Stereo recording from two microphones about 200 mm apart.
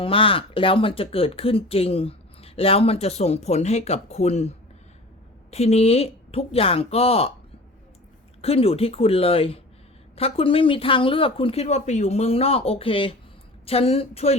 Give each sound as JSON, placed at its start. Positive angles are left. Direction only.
{"t": 0.0, "sound": "speech", "side_deg": 25}
{"t": 8.4, "sound": "speech", "side_deg": 30}